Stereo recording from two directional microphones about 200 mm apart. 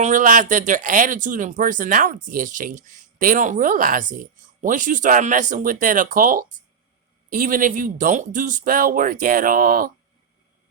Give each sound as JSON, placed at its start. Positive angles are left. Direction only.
{"t": 0.0, "sound": "speech", "side_deg": -40}